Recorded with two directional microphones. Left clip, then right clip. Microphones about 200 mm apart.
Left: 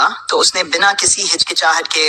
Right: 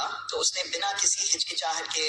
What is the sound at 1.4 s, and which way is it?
Speech, 50° left (ahead or behind).